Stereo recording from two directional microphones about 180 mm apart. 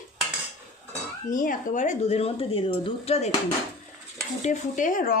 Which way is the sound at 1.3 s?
45° left (ahead or behind).